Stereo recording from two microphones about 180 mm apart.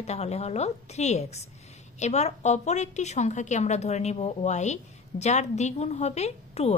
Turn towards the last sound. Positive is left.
turn(degrees=35)  # may be behind; listen again after turning